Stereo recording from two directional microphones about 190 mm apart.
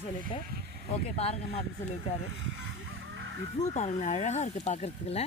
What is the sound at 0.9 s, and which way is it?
Speech, 35° left (ahead or behind).